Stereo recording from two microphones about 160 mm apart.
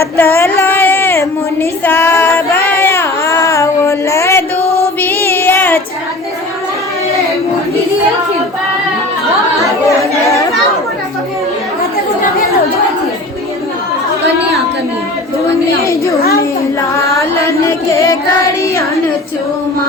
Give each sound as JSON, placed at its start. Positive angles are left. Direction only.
{"t": 0.2, "sound": "a sound", "side_deg": 15}
{"t": 1.8, "sound": "child singing", "side_deg": 15}
{"t": 17.2, "sound": "chant", "side_deg": 20}